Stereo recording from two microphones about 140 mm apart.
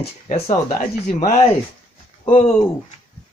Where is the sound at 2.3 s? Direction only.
50° left (ahead or behind).